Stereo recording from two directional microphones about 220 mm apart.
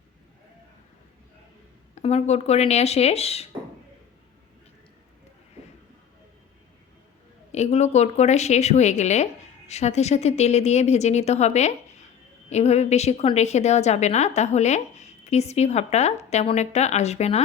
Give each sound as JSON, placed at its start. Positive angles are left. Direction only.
{"t": 2.0, "sound": "speech", "side_deg": 30}
{"t": 7.5, "sound": "a woman's voice", "side_deg": 30}